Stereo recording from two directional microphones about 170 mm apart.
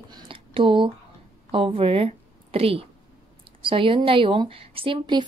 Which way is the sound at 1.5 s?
30° right (ahead or behind).